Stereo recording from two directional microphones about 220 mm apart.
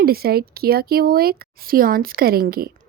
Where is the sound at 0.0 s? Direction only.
45° right (ahead or behind).